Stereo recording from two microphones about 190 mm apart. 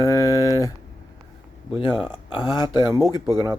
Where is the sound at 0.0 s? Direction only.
15° left (ahead or behind).